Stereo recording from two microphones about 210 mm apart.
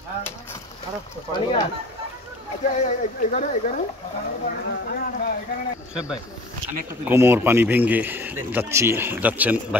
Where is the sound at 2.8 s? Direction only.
35° left (ahead or behind).